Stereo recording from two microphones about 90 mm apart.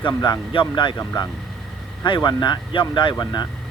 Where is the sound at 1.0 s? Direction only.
45° left (ahead or behind).